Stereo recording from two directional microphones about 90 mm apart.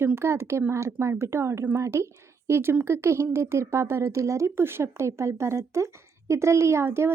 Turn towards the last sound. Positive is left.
turn(degrees=-25)  # may be behind; listen again after turning